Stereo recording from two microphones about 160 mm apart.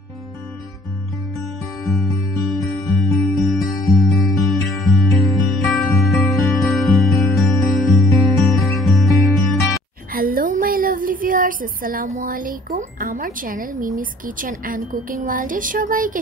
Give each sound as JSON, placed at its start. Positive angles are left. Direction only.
{"t": 2.5, "sound": "music", "side_deg": 0}
{"t": 10.1, "sound": "a sound", "side_deg": -65}
{"t": 13.0, "sound": "a woman's voice", "side_deg": -60}